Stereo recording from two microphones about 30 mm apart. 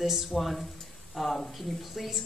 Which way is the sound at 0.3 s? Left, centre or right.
Centre.